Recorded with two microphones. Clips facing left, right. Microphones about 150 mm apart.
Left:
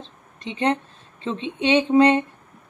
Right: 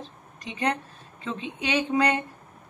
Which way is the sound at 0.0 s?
25° left (ahead or behind).